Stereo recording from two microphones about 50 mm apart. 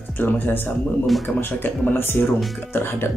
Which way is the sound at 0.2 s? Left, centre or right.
Left.